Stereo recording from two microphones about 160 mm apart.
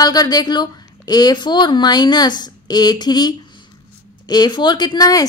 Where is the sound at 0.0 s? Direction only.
25° left (ahead or behind).